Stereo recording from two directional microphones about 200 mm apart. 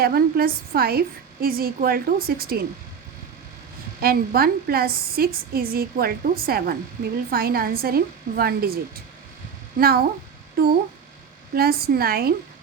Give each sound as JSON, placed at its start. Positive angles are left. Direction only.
{"t": 0.0, "sound": "a woman's voice", "side_deg": -50}
{"t": 4.0, "sound": "a woman's voice", "side_deg": -50}
{"t": 11.5, "sound": "a woman's voice", "side_deg": -50}